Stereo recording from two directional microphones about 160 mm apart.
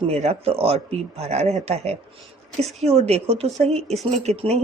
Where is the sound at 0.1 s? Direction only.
40° right (ahead or behind).